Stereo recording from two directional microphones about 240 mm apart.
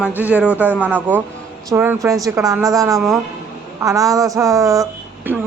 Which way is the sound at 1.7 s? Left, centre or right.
Centre.